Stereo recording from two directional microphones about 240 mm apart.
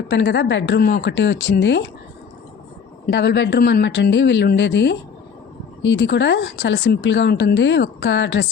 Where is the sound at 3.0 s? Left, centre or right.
Left.